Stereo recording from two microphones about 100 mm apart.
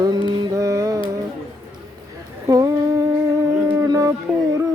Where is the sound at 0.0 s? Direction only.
45° right (ahead or behind).